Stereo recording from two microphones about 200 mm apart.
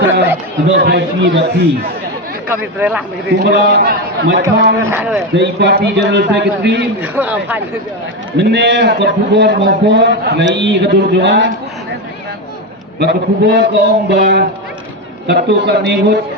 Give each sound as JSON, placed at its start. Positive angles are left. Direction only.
{"t": 0.7, "sound": "a man's voice", "side_deg": -60}
{"t": 2.5, "sound": "a man's voice", "side_deg": -10}
{"t": 3.3, "sound": "a man's voice", "side_deg": -60}
{"t": 4.8, "sound": "a man's voice", "side_deg": -15}
{"t": 5.3, "sound": "a man's voice", "side_deg": -60}
{"t": 7.0, "sound": "a man's voice", "side_deg": -10}
{"t": 8.4, "sound": "a man's voice", "side_deg": -60}
{"t": 13.0, "sound": "a man's voice", "side_deg": -60}
{"t": 15.4, "sound": "a man's voice", "side_deg": -60}